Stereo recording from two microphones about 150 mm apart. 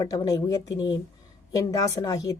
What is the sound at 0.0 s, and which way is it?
A woman's voice, 25° left (ahead or behind).